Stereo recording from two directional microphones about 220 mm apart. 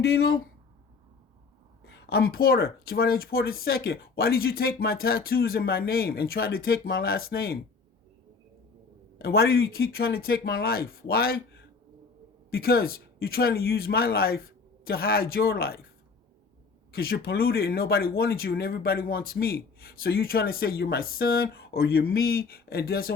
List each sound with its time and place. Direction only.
0.0 s speech: 45° left (ahead or behind)
1.9 s speech: 45° left (ahead or behind)
9.1 s speech: 45° left (ahead or behind)
16.9 s speech: 45° left (ahead or behind)